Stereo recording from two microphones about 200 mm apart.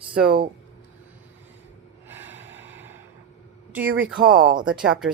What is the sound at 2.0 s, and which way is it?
Snort, 10° right (ahead or behind).